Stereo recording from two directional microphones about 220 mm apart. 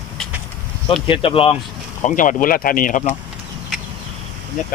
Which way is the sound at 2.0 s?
35° left (ahead or behind).